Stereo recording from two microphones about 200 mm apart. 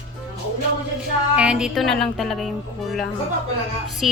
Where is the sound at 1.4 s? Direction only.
5° right (ahead or behind).